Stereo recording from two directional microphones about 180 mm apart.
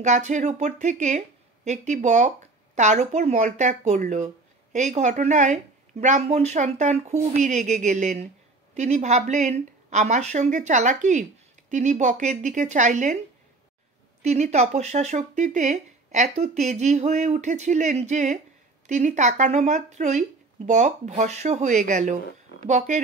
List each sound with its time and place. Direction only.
0.0 s a woman's voice: 40° right (ahead or behind)
14.2 s a woman's voice: 40° right (ahead or behind)